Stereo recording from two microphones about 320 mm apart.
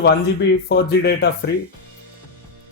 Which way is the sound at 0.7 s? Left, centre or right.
Left.